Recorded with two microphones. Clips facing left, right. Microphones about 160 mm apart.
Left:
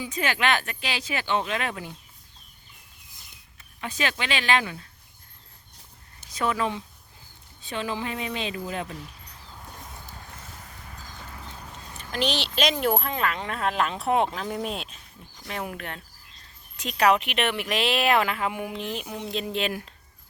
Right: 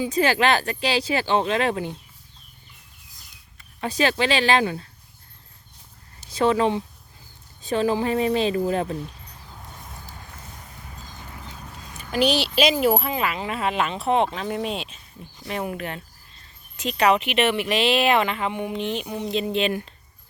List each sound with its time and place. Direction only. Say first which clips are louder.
0.0 s speech: right 6 dB; 35° right (ahead or behind)
3.8 s speech: right 7 dB; 35° right (ahead or behind)
6.3 s speech: right 7 dB; 30° right (ahead or behind)
7.6 s speech: right 9 dB; 40° right (ahead or behind)
11.9 s speech: right 6 dB; 10° right (ahead or behind)